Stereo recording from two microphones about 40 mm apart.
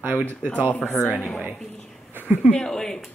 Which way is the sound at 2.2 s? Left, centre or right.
Right.